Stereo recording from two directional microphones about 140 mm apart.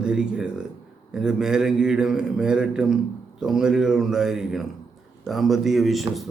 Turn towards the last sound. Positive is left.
turn(degrees=0)  # may be behind; listen again after turning